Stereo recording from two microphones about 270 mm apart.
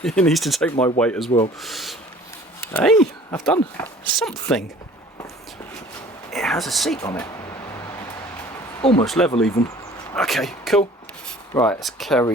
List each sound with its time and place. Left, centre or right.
0.0 s speech: centre
6.3 s speech: centre
7.0 s speech: centre
8.8 s speech: centre
9.0 s speech: centre